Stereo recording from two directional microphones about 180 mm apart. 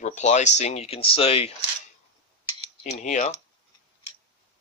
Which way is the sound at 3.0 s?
45° left (ahead or behind).